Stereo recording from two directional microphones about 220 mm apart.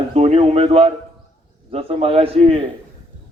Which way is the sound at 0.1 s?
30° right (ahead or behind).